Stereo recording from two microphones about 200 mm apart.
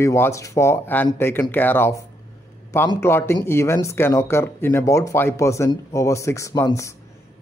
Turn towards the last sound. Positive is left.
turn(degrees=15)  # may be behind; listen again after turning